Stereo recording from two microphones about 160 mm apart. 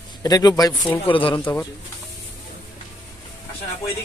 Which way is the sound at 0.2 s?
25° left (ahead or behind).